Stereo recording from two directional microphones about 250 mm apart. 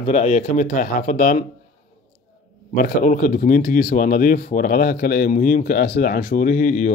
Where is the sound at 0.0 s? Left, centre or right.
Left.